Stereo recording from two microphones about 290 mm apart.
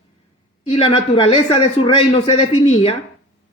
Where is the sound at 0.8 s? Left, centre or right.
Centre.